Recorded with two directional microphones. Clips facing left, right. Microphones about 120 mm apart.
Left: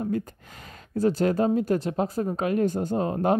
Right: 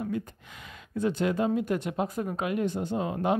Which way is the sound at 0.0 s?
40° left (ahead or behind).